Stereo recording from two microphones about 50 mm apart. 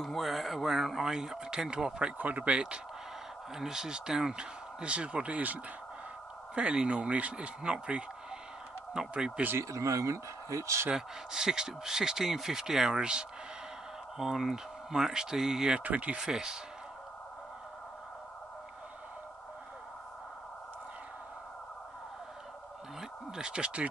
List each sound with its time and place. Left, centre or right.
0.0 s speech: centre
2.1 s speech: right
2.5 s a man's voice: centre
6.5 s a man's voice: centre
9.6 s speech: right
11.0 s speech: centre
14.1 s speech: centre
15.7 s a man's voice: right
16.2 s speech: centre
22.9 s a sound: centre